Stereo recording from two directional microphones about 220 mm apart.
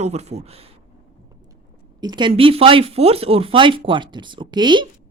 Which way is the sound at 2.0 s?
20° right (ahead or behind).